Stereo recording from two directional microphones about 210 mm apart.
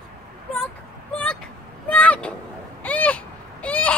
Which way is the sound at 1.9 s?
5° left (ahead or behind).